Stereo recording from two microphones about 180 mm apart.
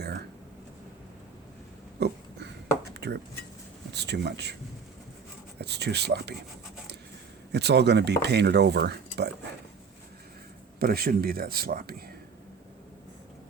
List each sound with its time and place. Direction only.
0.0 s a sound: 65° right (ahead or behind)
2.0 s a sound: 65° right (ahead or behind)
2.9 s chopping: 70° right (ahead or behind)
3.9 s speech: 70° right (ahead or behind)
5.5 s speech: 65° right (ahead or behind)
7.5 s speech: 70° right (ahead or behind)
10.8 s speech: 60° right (ahead or behind)